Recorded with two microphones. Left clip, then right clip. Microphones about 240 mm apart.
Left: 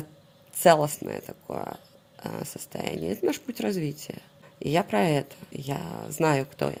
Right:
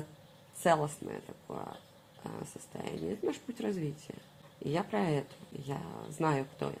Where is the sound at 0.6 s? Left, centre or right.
Left.